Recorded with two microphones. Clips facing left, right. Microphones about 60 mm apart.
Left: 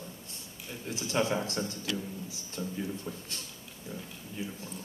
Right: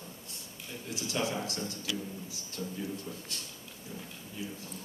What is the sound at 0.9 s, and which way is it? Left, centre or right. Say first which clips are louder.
A man's voice: left 4 dB; left.